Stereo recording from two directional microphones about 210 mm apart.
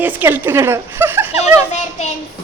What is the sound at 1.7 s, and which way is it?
Child singing, 35° left (ahead or behind).